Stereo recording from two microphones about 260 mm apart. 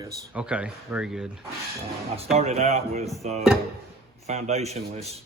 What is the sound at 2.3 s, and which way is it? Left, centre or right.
A man's voice, right.